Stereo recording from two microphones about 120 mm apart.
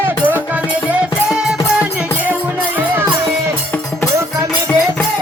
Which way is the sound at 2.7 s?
20° right (ahead or behind).